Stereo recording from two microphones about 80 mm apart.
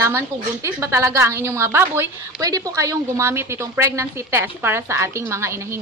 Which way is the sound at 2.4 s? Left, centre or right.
Right.